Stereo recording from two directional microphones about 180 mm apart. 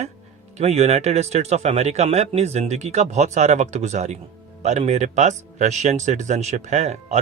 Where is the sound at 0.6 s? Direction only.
35° right (ahead or behind).